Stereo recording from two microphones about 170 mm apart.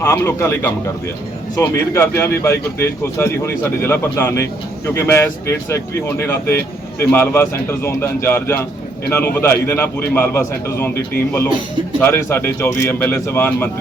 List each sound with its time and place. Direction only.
0.0 s speech: 15° left (ahead or behind)
11.9 s speech: 15° left (ahead or behind)